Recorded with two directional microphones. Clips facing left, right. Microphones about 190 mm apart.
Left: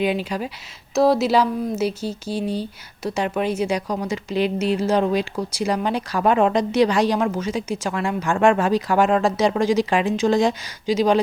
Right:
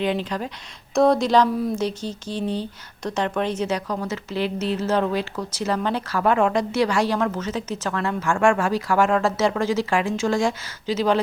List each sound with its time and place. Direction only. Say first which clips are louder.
0.0 s speech: left 2 dB; 10° left (ahead or behind)